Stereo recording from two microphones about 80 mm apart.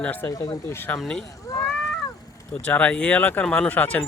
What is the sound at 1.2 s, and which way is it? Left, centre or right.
Speech, left.